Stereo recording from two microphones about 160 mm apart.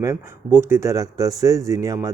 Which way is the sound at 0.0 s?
15° right (ahead or behind).